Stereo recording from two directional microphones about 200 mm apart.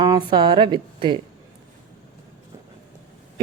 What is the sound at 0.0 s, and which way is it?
A woman's voice, 20° right (ahead or behind).